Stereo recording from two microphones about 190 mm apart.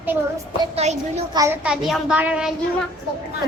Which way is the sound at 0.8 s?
35° right (ahead or behind).